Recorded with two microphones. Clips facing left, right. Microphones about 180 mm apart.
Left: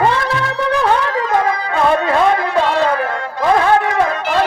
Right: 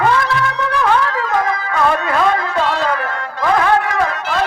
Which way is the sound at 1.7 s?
25° left (ahead or behind).